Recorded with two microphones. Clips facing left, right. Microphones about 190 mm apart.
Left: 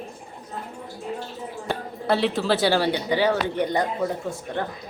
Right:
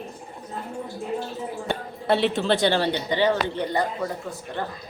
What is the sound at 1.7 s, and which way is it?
A woman's voice, centre (ahead or behind).